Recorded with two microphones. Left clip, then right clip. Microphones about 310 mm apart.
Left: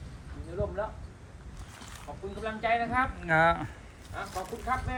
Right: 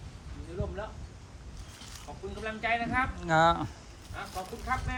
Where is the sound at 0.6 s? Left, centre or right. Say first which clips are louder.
Left 6 dB; centre.